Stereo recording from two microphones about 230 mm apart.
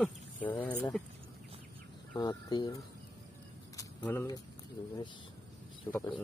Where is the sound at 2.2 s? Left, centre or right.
Centre.